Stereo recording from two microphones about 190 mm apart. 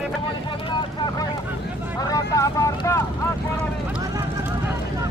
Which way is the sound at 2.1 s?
15° left (ahead or behind).